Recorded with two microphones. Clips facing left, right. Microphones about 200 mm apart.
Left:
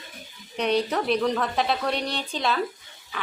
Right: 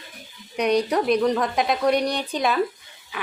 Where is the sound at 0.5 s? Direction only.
10° right (ahead or behind).